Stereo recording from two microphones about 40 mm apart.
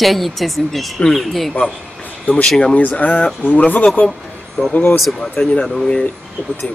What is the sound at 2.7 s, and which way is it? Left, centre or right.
Speech, left.